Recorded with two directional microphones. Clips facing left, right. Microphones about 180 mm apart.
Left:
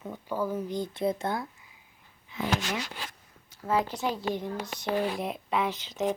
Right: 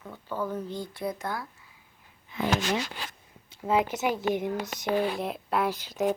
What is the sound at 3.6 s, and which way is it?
Speech, 20° right (ahead or behind).